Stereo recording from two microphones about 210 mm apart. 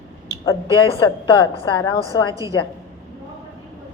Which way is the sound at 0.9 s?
20° left (ahead or behind).